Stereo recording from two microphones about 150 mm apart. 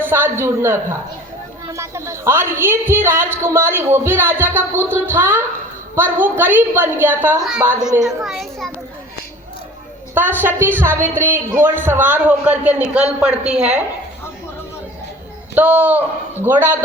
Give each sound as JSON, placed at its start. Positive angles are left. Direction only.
{"t": 0.0, "sound": "a man's voice", "side_deg": -15}
{"t": 8.0, "sound": "a child's voice", "side_deg": 0}
{"t": 10.4, "sound": "a woman's voice", "side_deg": -15}
{"t": 15.5, "sound": "a woman's voice", "side_deg": -10}